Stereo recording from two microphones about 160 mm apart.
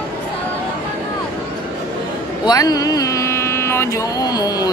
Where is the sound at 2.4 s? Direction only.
25° left (ahead or behind).